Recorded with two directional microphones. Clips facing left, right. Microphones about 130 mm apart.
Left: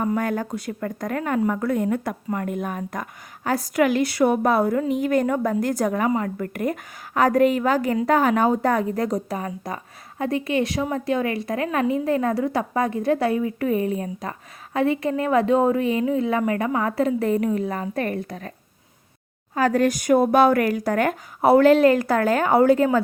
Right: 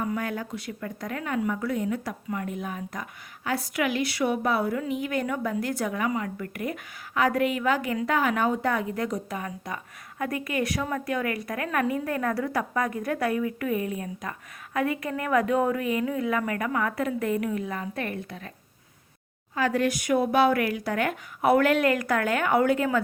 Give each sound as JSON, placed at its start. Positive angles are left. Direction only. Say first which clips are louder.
{"t": 0.0, "sound": "speech", "louder": "left 6 dB", "side_deg": 45}
{"t": 19.5, "sound": "speech", "louder": "left 5 dB", "side_deg": 40}